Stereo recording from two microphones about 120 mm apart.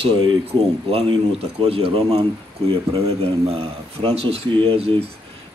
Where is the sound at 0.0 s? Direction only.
45° right (ahead or behind).